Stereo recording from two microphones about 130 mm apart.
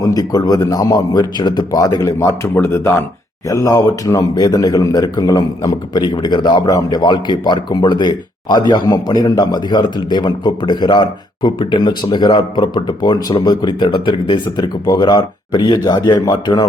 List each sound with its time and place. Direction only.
0.0 s a man's voice: 30° left (ahead or behind)